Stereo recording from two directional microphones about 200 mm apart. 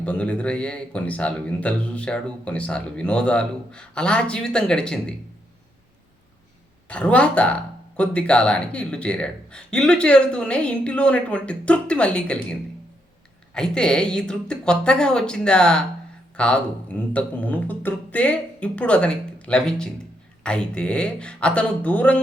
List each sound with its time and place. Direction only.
0.0 s speech: 5° left (ahead or behind)
6.8 s speech: 5° left (ahead or behind)